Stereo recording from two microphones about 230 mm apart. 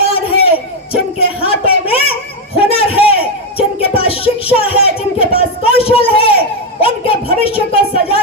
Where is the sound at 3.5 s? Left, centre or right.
Left.